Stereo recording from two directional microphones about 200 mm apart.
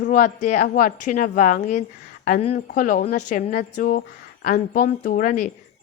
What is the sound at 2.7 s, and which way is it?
Speech, 45° left (ahead or behind).